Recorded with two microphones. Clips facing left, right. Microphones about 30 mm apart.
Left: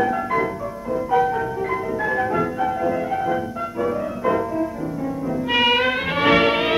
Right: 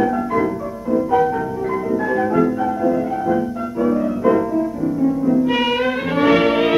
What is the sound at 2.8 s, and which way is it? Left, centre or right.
Music, left.